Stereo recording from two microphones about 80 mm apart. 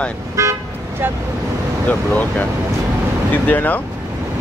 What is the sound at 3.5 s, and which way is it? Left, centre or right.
Speech, left.